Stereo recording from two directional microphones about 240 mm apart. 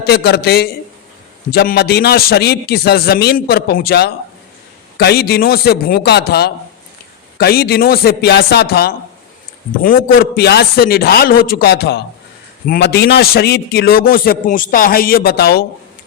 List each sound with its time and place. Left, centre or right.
0.0 s a man's voice: left